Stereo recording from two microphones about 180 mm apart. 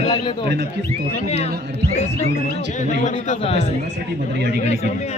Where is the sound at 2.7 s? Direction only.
45° left (ahead or behind).